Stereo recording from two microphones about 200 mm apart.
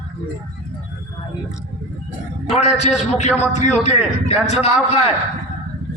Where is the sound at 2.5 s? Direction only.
35° left (ahead or behind).